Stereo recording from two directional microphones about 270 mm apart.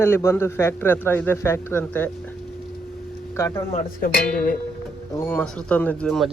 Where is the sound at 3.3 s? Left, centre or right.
Centre.